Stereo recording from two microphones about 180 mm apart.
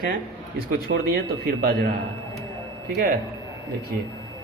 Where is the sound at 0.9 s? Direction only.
65° right (ahead or behind).